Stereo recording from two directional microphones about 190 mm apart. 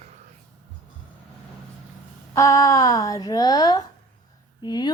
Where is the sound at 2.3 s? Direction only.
15° left (ahead or behind).